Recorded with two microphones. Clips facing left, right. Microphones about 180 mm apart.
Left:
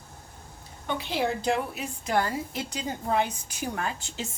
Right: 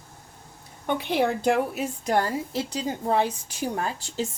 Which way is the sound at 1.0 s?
55° right (ahead or behind).